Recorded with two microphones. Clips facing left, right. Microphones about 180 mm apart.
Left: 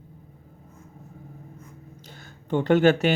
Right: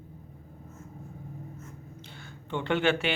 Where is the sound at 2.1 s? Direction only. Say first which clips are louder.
Left 8 dB; 40° left (ahead or behind).